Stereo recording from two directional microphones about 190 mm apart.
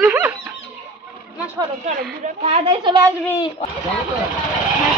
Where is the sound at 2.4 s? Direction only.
30° right (ahead or behind).